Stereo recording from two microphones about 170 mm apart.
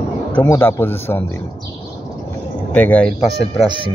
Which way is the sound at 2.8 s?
10° left (ahead or behind).